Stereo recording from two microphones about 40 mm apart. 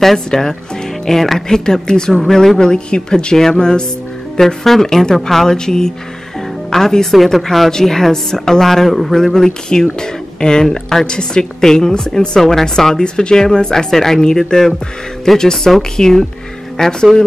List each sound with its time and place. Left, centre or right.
0.0 s speech: centre
2.7 s speech: left
4.4 s speech: centre